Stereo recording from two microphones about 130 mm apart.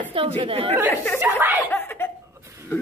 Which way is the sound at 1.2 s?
15° right (ahead or behind).